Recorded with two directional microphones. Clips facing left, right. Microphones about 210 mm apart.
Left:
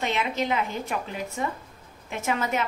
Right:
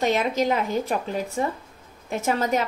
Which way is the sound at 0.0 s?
40° right (ahead or behind).